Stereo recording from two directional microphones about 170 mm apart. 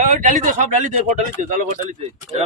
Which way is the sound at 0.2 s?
50° right (ahead or behind).